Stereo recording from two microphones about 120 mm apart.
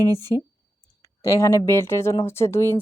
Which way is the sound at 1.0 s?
25° left (ahead or behind).